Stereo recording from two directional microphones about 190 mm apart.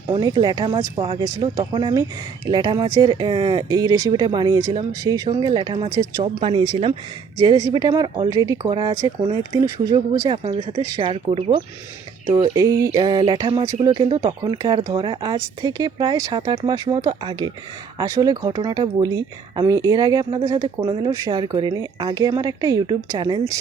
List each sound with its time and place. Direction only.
0.1 s speech: 20° right (ahead or behind)
7.3 s speech: 20° right (ahead or behind)